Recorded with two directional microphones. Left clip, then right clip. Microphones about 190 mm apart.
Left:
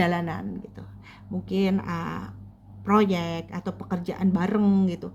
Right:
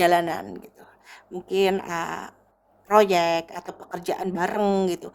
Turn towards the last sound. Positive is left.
turn(degrees=-45)  # may be behind; listen again after turning